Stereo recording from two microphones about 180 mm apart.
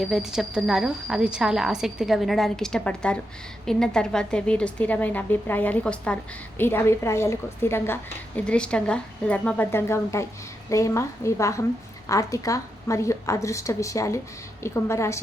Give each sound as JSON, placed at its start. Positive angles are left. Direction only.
{"t": 0.0, "sound": "a woman's voice", "side_deg": -5}